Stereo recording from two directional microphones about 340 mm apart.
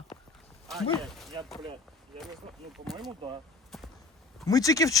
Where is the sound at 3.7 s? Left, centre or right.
Centre.